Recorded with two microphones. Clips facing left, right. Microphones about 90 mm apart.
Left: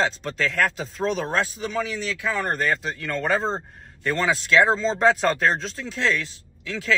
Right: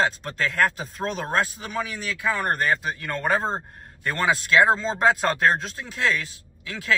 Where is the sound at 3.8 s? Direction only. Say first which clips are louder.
Even; 50° right (ahead or behind).